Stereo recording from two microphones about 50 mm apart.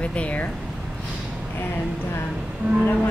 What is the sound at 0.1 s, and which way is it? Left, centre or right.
Speech, left.